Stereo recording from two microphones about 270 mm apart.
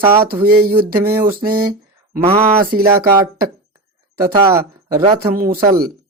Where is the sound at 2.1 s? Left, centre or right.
Centre.